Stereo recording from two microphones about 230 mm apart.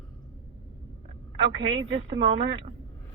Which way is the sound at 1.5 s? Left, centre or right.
Right.